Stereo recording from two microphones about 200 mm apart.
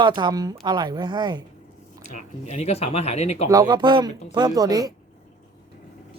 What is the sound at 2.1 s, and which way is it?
Speech, 35° left (ahead or behind).